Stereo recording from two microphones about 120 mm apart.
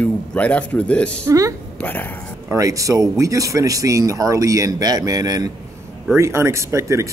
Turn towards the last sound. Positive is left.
turn(degrees=-25)  # may be behind; listen again after turning